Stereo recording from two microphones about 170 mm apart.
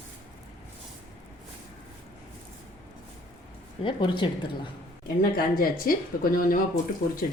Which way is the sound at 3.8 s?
30° left (ahead or behind).